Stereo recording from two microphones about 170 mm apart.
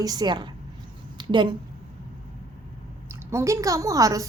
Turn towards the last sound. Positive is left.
turn(degrees=-20)  # may be behind; listen again after turning